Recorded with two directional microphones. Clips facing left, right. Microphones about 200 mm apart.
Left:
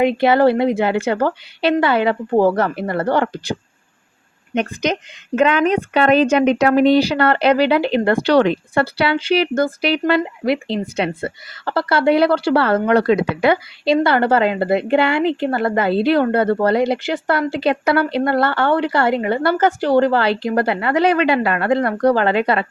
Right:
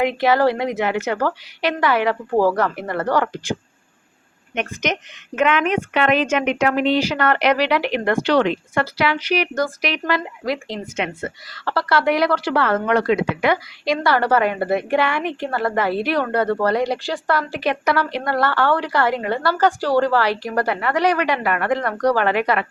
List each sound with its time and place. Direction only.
0.0 s a woman's voice: 25° left (ahead or behind)
4.5 s a woman's voice: 35° left (ahead or behind)